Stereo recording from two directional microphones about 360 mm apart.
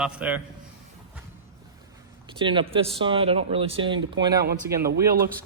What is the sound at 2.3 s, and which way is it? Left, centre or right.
Speech, centre.